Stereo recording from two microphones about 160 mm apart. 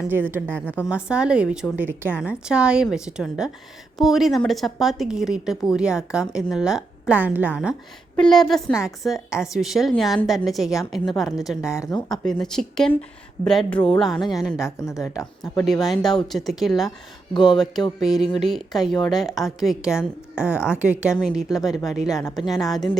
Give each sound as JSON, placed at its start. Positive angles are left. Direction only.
{"t": 0.0, "sound": "a woman's voice", "side_deg": -10}
{"t": 0.4, "sound": "a woman's voice", "side_deg": 10}
{"t": 0.9, "sound": "a woman's voice", "side_deg": -5}
{"t": 8.1, "sound": "a woman's voice", "side_deg": 5}
{"t": 11.7, "sound": "speech", "side_deg": 20}
{"t": 12.2, "sound": "a woman's voice", "side_deg": 5}
{"t": 14.6, "sound": "speech", "side_deg": 20}
{"t": 15.6, "sound": "a woman's voice", "side_deg": 0}
{"t": 17.3, "sound": "speech", "side_deg": 30}
{"t": 18.0, "sound": "a woman's voice", "side_deg": 0}